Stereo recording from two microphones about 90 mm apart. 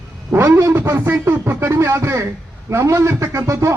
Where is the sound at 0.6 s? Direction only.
25° right (ahead or behind).